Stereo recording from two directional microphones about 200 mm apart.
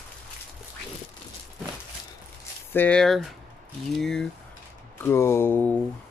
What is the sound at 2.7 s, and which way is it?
Speech, 5° left (ahead or behind).